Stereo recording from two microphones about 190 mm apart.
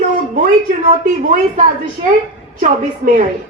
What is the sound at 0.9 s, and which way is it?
Speech, 40° right (ahead or behind).